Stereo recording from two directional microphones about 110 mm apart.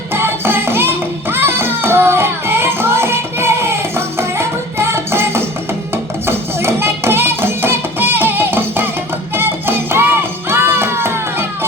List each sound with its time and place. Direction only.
0.1 s music: 20° right (ahead or behind)